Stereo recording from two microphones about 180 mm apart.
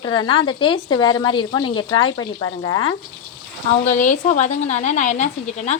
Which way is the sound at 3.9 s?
45° left (ahead or behind).